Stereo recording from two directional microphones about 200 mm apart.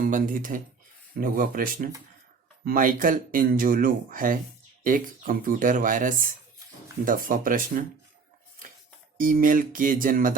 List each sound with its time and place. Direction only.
0.0 s speech: 40° right (ahead or behind)
9.1 s speech: 45° right (ahead or behind)